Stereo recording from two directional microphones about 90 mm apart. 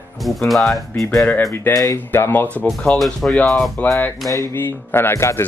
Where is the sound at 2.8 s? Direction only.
5° left (ahead or behind).